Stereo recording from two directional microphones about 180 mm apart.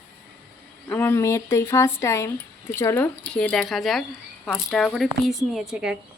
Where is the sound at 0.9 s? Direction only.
10° left (ahead or behind).